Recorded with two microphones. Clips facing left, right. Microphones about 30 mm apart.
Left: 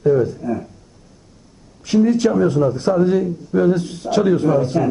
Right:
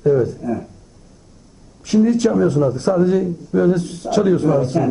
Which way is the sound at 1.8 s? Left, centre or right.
Centre.